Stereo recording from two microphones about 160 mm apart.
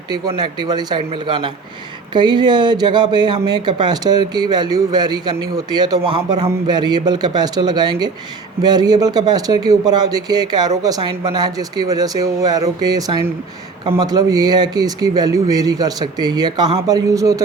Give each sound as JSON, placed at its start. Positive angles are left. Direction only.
{"t": 0.1, "sound": "speech", "side_deg": -25}